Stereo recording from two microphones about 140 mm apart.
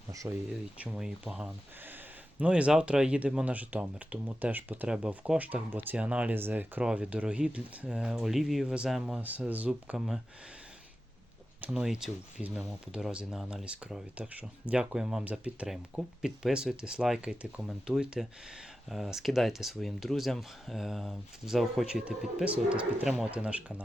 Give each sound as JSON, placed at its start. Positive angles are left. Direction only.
{"t": 0.1, "sound": "speech", "side_deg": -25}
{"t": 0.9, "sound": "speech", "side_deg": -5}
{"t": 11.6, "sound": "speech", "side_deg": -5}